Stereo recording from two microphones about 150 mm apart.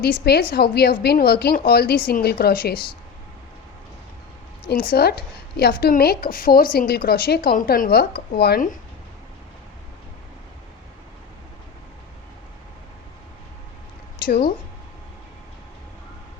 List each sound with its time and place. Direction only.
0.0 s a woman's voice: 90° left
4.7 s a woman's voice: 85° left
14.3 s a woman's voice: 90° left